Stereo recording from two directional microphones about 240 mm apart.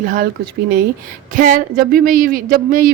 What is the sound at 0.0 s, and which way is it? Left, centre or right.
Speech, right.